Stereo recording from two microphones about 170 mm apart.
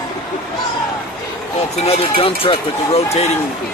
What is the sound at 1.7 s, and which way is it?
Speech, 35° left (ahead or behind).